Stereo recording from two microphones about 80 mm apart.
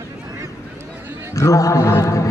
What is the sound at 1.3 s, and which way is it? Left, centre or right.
Speech, left.